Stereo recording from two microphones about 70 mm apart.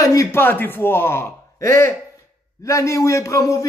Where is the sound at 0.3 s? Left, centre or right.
Left.